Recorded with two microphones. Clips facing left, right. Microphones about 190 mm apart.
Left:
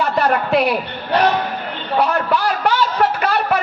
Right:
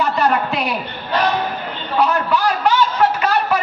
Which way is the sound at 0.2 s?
60° left (ahead or behind).